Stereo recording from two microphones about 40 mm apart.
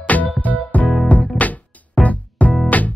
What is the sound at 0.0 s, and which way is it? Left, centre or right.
Music, left.